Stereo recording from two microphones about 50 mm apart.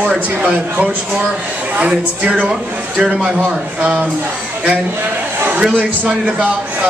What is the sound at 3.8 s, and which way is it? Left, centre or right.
Speech, right.